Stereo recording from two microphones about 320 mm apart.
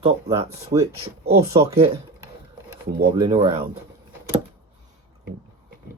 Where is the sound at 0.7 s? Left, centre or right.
Centre.